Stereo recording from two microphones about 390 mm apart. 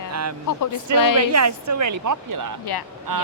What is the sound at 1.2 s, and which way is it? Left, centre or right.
Speech, right.